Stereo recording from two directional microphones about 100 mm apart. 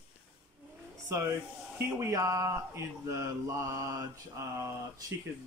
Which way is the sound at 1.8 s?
30° right (ahead or behind).